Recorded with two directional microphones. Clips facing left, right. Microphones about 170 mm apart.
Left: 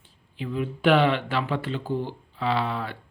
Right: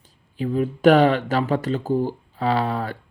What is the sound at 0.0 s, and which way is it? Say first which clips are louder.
Speech: right 8 dB; 40° right (ahead or behind).